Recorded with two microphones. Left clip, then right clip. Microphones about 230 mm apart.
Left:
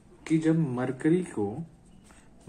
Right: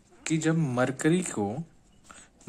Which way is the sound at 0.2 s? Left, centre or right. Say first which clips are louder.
Left 2 dB; right.